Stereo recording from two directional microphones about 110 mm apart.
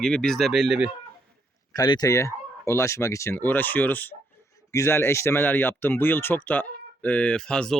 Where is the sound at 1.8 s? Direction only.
35° left (ahead or behind).